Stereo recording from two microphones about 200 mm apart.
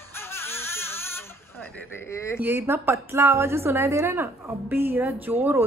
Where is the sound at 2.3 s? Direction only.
10° right (ahead or behind).